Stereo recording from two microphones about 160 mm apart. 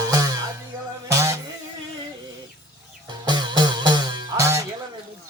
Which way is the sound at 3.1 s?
25° right (ahead or behind).